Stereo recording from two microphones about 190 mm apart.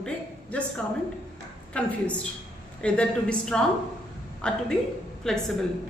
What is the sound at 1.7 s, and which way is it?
A man's voice, 5° left (ahead or behind).